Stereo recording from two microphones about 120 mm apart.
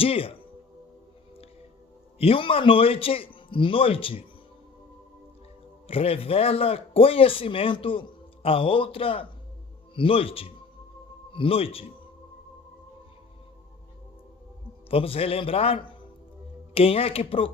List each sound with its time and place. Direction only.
0.0 s a man's voice: 50° left (ahead or behind)
2.1 s a man's voice: 50° left (ahead or behind)
5.9 s a man's voice: 55° left (ahead or behind)
14.8 s a man's voice: 50° left (ahead or behind)